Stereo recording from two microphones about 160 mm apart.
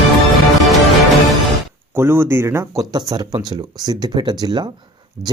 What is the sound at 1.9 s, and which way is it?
Speech, 15° right (ahead or behind).